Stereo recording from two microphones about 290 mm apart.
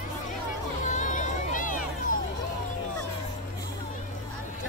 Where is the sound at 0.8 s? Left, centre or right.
Left.